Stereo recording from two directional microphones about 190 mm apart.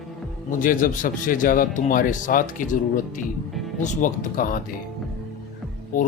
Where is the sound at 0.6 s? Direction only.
45° left (ahead or behind).